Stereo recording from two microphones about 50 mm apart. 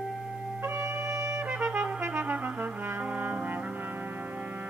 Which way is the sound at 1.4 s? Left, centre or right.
Right.